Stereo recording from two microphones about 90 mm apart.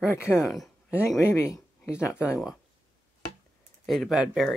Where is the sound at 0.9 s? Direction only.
30° left (ahead or behind).